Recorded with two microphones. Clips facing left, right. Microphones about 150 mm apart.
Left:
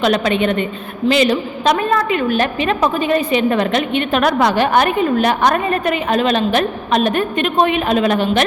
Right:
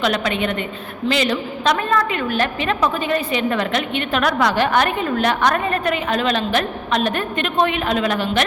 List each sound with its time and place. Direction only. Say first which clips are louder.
0.0 s a woman's voice: left 5 dB; 25° left (ahead or behind)